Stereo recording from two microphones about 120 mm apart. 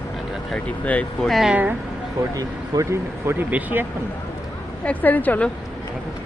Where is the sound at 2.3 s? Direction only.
25° right (ahead or behind).